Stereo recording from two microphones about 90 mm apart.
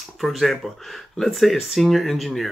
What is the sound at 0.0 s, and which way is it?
Speech, centre (ahead or behind).